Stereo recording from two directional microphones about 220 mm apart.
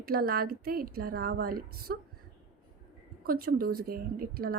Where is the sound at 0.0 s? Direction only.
45° right (ahead or behind).